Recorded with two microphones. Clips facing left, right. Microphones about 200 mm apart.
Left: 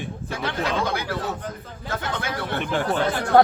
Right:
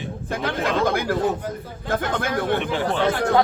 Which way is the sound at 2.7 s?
50° left (ahead or behind).